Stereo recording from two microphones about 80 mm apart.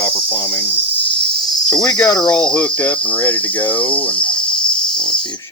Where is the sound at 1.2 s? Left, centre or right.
Centre.